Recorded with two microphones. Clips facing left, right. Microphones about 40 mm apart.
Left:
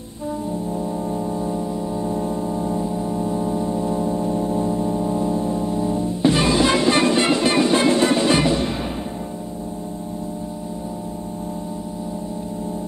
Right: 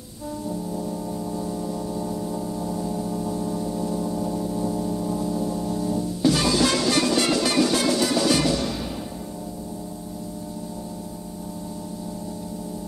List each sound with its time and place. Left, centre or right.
0.7 s music: left